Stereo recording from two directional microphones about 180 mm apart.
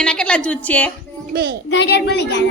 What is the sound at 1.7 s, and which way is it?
Speech, 70° left (ahead or behind).